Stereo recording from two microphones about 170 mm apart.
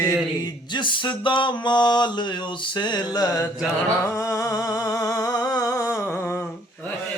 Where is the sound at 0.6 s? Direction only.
25° left (ahead or behind).